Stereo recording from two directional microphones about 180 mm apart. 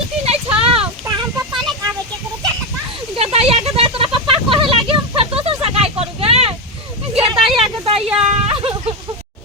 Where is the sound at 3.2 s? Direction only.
35° right (ahead or behind).